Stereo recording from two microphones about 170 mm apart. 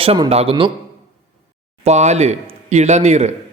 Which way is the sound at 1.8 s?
40° right (ahead or behind).